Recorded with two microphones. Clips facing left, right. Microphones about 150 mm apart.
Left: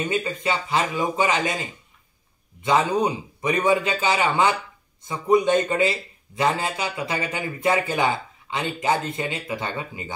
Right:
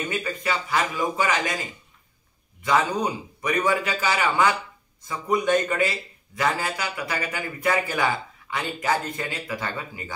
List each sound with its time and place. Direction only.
0.1 s speech: 25° left (ahead or behind)